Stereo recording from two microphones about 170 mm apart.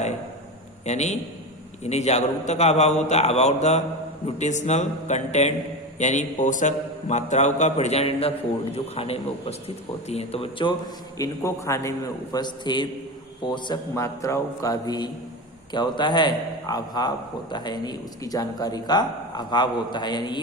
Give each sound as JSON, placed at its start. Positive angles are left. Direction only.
{"t": 0.9, "sound": "a man's voice", "side_deg": 40}
{"t": 11.2, "sound": "a man's voice", "side_deg": 15}